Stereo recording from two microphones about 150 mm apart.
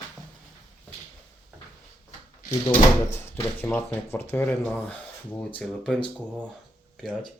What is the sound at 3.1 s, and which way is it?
Speech, 15° left (ahead or behind).